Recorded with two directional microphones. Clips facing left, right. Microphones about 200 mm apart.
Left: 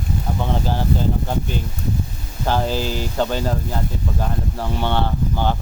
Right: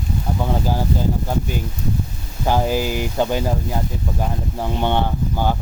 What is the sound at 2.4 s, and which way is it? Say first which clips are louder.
Speech: right 2 dB; 15° right (ahead or behind).